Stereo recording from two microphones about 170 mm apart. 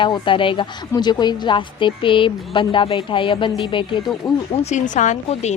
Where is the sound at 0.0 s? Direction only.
30° left (ahead or behind).